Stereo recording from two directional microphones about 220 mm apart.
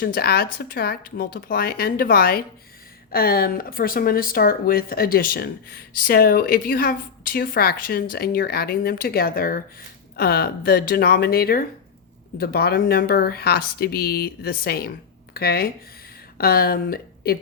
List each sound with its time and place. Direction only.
0.0 s speech: 45° left (ahead or behind)